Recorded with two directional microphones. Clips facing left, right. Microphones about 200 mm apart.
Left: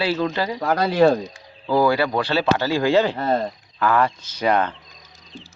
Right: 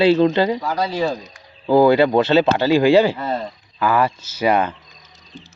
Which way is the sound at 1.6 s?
25° right (ahead or behind).